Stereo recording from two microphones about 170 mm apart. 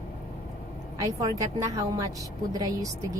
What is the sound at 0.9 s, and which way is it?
Speech, 20° right (ahead or behind).